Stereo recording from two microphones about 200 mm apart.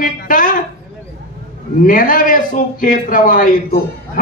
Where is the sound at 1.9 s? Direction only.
45° left (ahead or behind).